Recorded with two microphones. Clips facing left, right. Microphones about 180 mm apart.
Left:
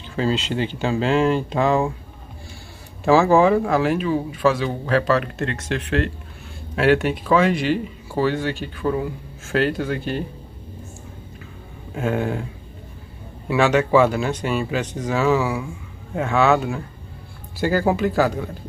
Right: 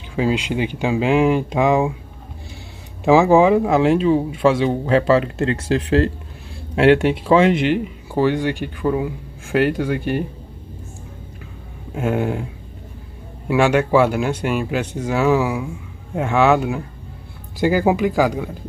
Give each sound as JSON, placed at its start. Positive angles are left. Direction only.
{"t": 0.1, "sound": "speech", "side_deg": -15}
{"t": 3.0, "sound": "speech", "side_deg": -15}
{"t": 11.9, "sound": "speech", "side_deg": -10}
{"t": 13.5, "sound": "speech", "side_deg": -10}